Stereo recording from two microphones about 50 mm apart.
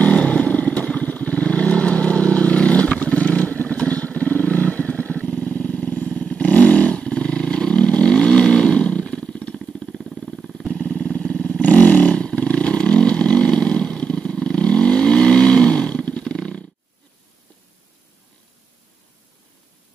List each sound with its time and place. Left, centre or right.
0.0 s vehicle: left
10.7 s vehicle: left